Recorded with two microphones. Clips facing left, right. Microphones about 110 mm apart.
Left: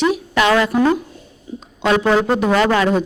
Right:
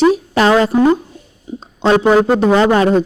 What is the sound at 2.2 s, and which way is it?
Speech, 40° right (ahead or behind).